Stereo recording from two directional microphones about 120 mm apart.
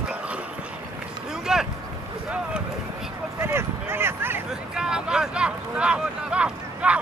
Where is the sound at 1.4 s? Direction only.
5° right (ahead or behind).